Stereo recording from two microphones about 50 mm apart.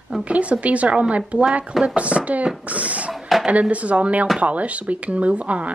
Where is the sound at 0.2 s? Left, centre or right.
Right.